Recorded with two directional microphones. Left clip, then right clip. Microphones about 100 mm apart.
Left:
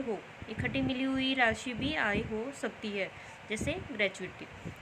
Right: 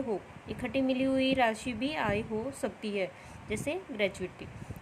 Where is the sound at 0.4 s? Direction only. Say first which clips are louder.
Right 2 dB; 90° right.